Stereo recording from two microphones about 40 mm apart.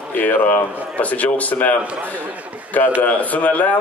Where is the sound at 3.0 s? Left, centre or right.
Left.